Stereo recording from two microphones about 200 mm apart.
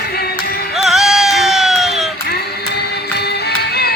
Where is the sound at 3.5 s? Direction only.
55° left (ahead or behind).